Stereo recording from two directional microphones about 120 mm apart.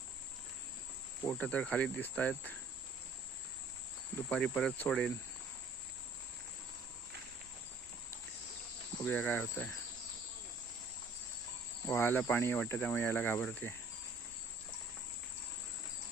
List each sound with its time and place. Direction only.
1.3 s speech: 10° left (ahead or behind)
4.3 s speech: 10° left (ahead or behind)
9.0 s speech: 15° left (ahead or behind)
11.9 s speech: 20° left (ahead or behind)